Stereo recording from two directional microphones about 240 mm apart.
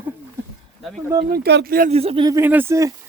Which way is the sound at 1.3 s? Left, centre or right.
Right.